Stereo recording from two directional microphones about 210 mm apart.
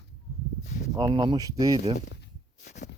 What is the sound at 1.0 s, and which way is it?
Speech, 20° right (ahead or behind).